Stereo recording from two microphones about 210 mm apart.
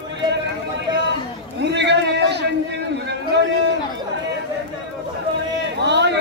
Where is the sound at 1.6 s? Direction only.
55° right (ahead or behind).